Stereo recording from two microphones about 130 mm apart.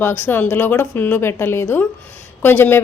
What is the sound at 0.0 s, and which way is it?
A woman's voice, 15° left (ahead or behind).